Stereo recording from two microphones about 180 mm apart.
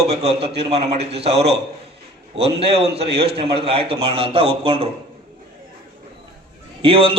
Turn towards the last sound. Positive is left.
turn(degrees=-30)  # may be behind; listen again after turning